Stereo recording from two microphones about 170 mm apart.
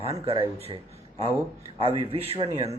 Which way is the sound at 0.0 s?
35° right (ahead or behind).